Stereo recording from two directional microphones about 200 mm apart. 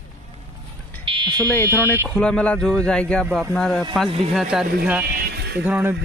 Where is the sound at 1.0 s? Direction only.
25° right (ahead or behind).